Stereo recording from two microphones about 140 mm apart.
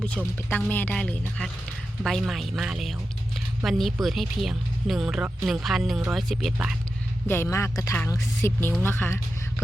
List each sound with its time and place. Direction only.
0.0 s speech: 10° left (ahead or behind)
7.3 s speech: 20° left (ahead or behind)